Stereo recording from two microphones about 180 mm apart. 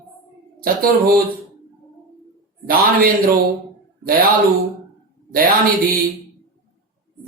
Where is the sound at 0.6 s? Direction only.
55° right (ahead or behind).